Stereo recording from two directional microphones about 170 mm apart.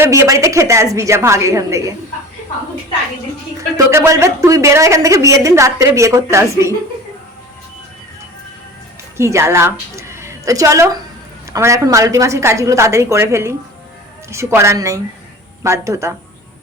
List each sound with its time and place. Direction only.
0.0 s a woman's voice: 15° right (ahead or behind)
3.8 s a woman's voice: 15° right (ahead or behind)
9.1 s a woman's voice: 15° right (ahead or behind)